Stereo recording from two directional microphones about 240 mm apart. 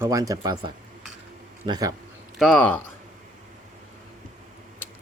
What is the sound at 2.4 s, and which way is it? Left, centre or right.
Speech, centre.